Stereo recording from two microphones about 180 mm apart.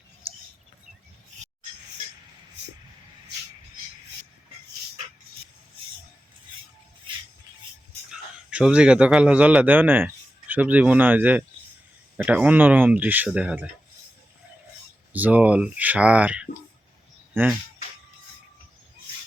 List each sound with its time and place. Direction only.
7.1 s music: 30° right (ahead or behind)
8.1 s a man's voice: 5° right (ahead or behind)
15.1 s speech: 10° right (ahead or behind)